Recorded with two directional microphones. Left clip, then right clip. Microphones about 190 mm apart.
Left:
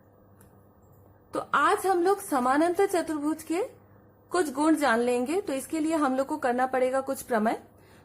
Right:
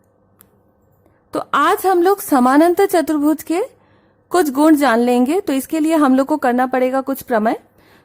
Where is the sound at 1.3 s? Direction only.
50° right (ahead or behind).